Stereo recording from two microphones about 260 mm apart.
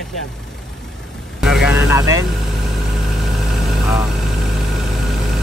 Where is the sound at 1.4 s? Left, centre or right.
Centre.